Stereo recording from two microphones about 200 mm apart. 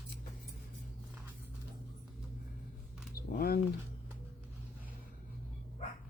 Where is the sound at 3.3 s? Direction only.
50° left (ahead or behind).